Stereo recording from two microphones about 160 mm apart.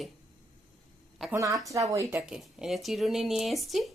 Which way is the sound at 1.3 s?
20° right (ahead or behind).